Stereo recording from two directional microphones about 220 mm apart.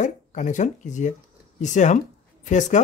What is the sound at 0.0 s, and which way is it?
Speech, 35° left (ahead or behind).